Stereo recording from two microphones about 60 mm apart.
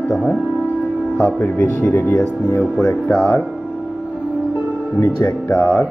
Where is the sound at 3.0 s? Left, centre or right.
Centre.